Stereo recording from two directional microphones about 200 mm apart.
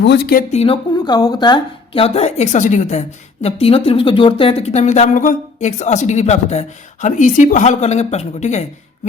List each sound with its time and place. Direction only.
0.0 s speech: 55° left (ahead or behind)
0.5 s a woman's voice: 30° left (ahead or behind)